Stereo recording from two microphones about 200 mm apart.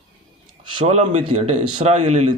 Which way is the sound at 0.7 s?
35° right (ahead or behind).